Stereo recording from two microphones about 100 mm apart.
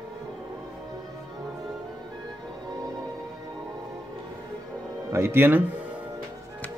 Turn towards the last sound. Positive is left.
turn(degrees=-20)  # may be behind; listen again after turning